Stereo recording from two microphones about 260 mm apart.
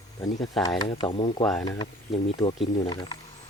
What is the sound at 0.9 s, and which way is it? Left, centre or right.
Speech, centre.